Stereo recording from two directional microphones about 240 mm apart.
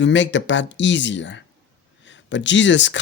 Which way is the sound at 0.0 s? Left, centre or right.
Left.